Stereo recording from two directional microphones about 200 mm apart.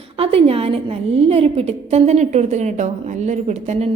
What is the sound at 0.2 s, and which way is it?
A woman's voice, 30° right (ahead or behind).